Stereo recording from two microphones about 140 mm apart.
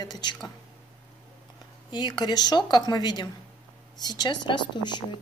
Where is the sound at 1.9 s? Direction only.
30° left (ahead or behind).